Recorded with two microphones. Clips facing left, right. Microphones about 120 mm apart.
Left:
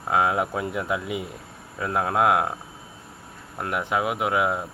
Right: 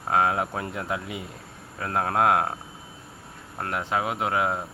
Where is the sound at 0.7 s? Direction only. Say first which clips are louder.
Left 3 dB; 30° right (ahead or behind).